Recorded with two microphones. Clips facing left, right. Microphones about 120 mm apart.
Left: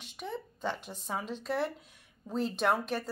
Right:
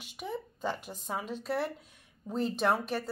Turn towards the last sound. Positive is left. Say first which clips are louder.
# even
turn(degrees=0)  # may be behind; listen again after turning